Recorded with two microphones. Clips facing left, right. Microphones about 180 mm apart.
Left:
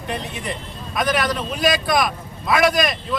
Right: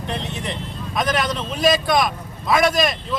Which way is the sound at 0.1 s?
Centre (ahead or behind).